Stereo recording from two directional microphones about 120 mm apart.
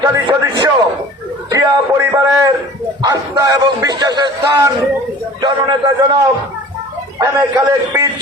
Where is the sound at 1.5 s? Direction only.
30° right (ahead or behind).